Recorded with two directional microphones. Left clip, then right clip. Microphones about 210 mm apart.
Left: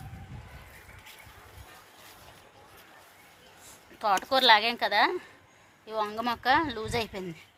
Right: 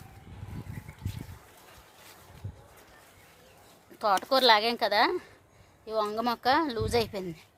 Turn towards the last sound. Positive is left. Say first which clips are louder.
# right 3 dB
turn(degrees=-50)  # may be behind; listen again after turning